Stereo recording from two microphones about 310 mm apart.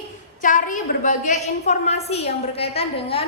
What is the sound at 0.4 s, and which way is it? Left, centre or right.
A woman's voice, left.